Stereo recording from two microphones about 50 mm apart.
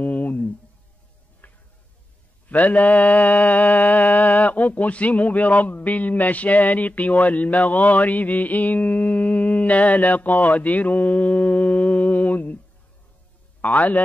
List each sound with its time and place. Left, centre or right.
0.0 s a sound: left
1.4 s tick-tock: left
2.4 s mantra: left
13.6 s mantra: left